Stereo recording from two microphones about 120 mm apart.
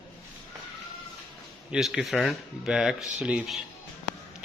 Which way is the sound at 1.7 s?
5° right (ahead or behind).